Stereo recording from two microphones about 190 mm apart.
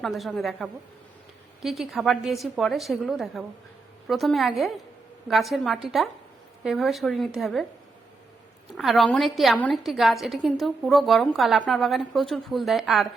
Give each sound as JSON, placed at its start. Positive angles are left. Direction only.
{"t": 0.0, "sound": "a woman's voice", "side_deg": 0}
{"t": 8.7, "sound": "a woman's voice", "side_deg": 0}